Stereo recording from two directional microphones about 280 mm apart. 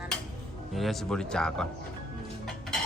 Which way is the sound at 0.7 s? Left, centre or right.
Centre.